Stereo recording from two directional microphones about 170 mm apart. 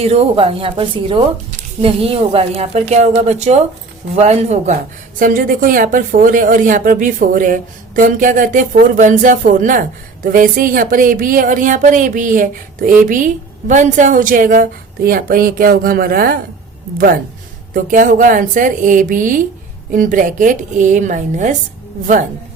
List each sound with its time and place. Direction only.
0.0 s speech: 35° right (ahead or behind)
5.2 s speech: 55° right (ahead or behind)
17.7 s speech: 50° right (ahead or behind)